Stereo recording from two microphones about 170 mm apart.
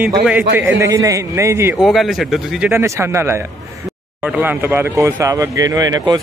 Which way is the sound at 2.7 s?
15° right (ahead or behind).